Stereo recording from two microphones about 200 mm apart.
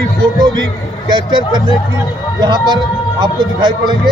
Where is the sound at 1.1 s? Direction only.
20° right (ahead or behind).